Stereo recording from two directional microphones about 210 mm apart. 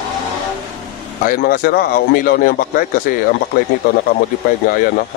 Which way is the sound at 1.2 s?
45° left (ahead or behind).